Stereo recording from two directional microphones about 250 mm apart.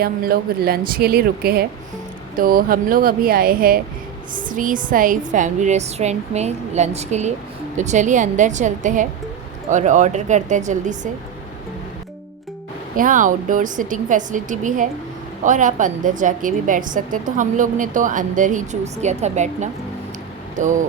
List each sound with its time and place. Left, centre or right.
0.0 s a woman's voice: right
13.0 s a woman's voice: right